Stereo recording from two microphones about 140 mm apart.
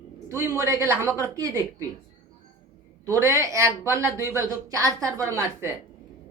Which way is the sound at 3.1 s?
20° right (ahead or behind).